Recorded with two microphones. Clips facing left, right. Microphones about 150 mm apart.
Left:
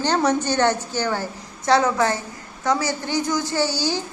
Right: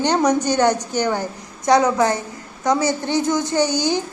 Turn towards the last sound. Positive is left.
turn(degrees=-20)  # may be behind; listen again after turning